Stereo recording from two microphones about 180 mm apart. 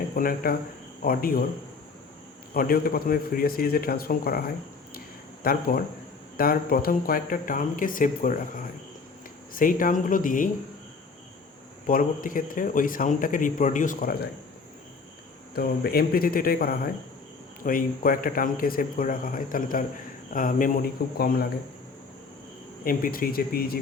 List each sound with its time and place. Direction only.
0.2 s speech: 50° left (ahead or behind)
2.5 s a man's voice: 55° left (ahead or behind)
4.9 s a sound: 55° left (ahead or behind)
6.3 s speech: 55° left (ahead or behind)
11.9 s speech: 50° left (ahead or behind)
15.5 s a man's voice: 60° left (ahead or behind)
22.8 s speech: 50° left (ahead or behind)